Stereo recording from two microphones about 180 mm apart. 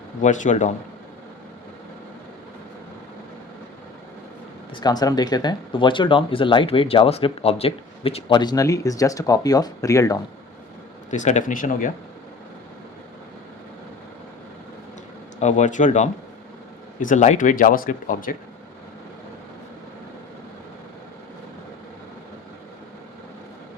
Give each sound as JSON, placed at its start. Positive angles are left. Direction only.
{"t": 0.2, "sound": "speech", "side_deg": 45}
{"t": 4.7, "sound": "speech", "side_deg": 20}
{"t": 11.1, "sound": "speech", "side_deg": 45}
{"t": 15.4, "sound": "speech", "side_deg": 40}